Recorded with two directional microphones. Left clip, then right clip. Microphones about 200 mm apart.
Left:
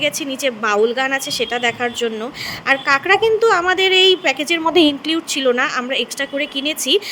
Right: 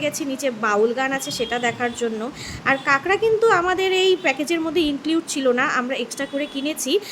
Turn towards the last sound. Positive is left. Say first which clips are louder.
# left 5 dB
turn(degrees=30)  # may be behind; listen again after turning